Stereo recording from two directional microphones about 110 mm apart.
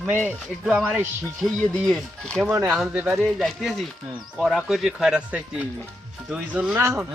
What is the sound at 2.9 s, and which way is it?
Sheep, 10° right (ahead or behind).